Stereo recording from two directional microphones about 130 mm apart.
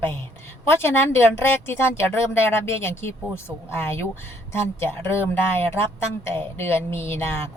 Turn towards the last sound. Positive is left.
turn(degrees=20)  # may be behind; listen again after turning